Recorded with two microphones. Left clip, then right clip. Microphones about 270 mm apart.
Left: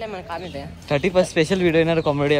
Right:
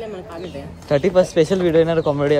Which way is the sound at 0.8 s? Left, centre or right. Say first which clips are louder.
Right 3 dB; left.